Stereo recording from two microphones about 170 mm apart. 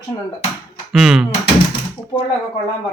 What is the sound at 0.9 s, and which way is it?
Speech, centre (ahead or behind).